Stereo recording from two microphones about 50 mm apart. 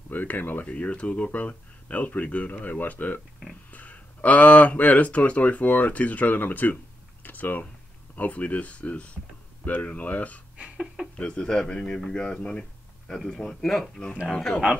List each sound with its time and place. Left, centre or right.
0.1 s speech: left
0.7 s speech: left
7.2 s a sound: left
8.2 s a man's voice: left